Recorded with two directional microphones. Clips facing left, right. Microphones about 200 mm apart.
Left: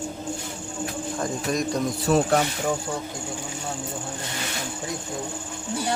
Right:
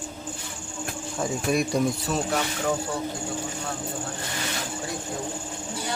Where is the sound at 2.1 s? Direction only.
55° left (ahead or behind).